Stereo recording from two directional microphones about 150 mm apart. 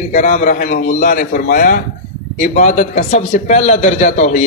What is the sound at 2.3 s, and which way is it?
A man's voice, 60° left (ahead or behind).